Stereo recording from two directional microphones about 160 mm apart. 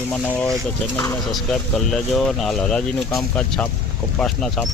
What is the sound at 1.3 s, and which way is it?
Speech, 5° left (ahead or behind).